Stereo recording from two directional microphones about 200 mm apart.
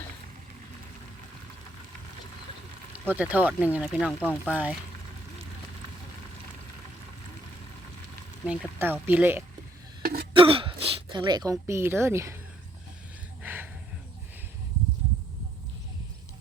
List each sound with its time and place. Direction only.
3.1 s speech: 5° right (ahead or behind)
8.4 s speech: 10° right (ahead or behind)
10.0 s cough: 50° right (ahead or behind)
10.3 s a sound: 25° right (ahead or behind)
11.6 s speech: 10° right (ahead or behind)
13.4 s a sound: 10° right (ahead or behind)